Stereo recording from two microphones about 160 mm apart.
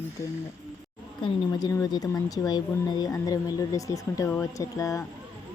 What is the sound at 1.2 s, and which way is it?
Speech, 25° left (ahead or behind).